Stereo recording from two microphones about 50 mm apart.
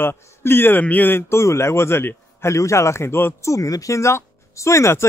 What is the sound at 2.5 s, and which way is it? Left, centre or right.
Speech, left.